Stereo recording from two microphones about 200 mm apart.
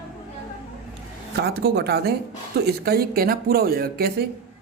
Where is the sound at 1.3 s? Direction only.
55° right (ahead or behind).